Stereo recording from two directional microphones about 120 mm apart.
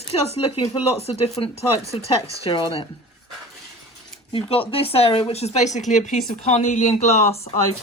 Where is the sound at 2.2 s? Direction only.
50° left (ahead or behind).